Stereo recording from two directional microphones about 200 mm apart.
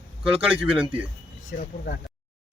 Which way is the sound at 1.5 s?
50° left (ahead or behind).